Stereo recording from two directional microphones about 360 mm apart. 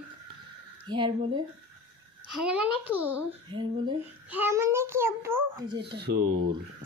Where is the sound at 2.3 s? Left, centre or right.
Centre.